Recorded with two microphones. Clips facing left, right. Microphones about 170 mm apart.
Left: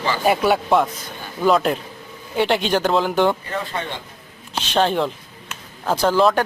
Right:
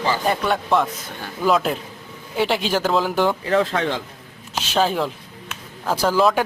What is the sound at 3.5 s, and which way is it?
Speech, 90° right.